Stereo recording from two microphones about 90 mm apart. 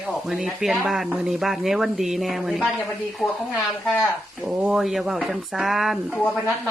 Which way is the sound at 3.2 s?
15° left (ahead or behind).